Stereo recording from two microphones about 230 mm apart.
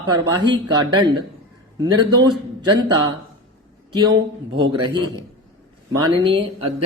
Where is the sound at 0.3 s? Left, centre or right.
Centre.